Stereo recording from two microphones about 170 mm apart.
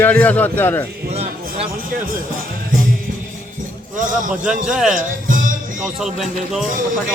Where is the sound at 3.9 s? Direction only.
50° right (ahead or behind).